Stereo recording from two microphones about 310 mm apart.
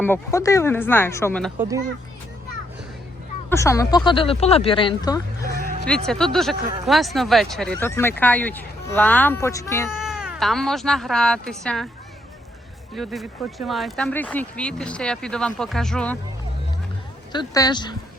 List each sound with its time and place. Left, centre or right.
0.0 s speech: centre
3.5 s speech: centre
6.1 s speech: centre
9.9 s speech: centre
13.0 s speech: centre
17.3 s speech: centre